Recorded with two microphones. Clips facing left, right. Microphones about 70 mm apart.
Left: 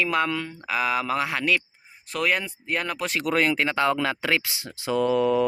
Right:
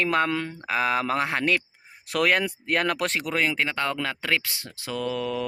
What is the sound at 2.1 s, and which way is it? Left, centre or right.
Speech, right.